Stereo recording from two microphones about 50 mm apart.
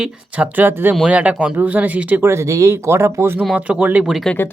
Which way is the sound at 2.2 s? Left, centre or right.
Right.